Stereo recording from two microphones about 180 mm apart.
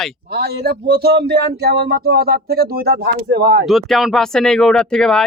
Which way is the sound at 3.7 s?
Centre (ahead or behind).